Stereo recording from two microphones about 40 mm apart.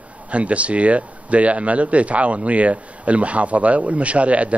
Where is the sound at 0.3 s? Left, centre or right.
Right.